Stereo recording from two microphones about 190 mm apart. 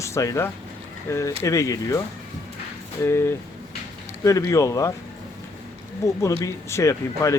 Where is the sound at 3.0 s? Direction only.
15° left (ahead or behind).